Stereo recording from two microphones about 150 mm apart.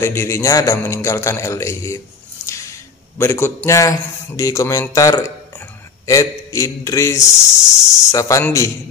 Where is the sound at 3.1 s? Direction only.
15° left (ahead or behind).